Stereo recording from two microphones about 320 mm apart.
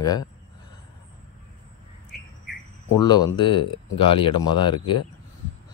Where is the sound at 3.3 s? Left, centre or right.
Centre.